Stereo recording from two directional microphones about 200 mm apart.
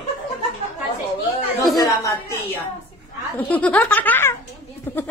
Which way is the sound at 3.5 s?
10° left (ahead or behind).